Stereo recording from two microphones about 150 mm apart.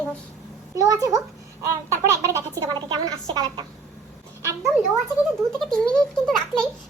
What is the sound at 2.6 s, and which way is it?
A woman's voice, 25° right (ahead or behind).